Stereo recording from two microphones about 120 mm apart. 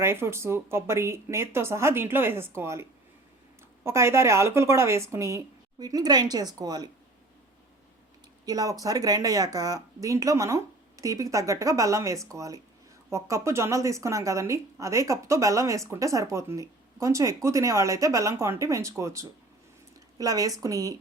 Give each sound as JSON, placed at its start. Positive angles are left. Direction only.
{"t": 0.0, "sound": "speech", "side_deg": -20}
{"t": 3.8, "sound": "a woman's voice", "side_deg": -20}
{"t": 8.4, "sound": "a woman's voice", "side_deg": -30}